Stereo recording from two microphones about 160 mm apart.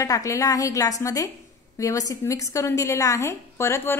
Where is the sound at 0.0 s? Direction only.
20° left (ahead or behind).